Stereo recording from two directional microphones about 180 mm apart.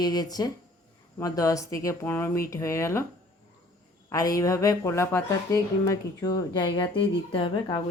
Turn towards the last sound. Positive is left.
turn(degrees=25)  # may be behind; listen again after turning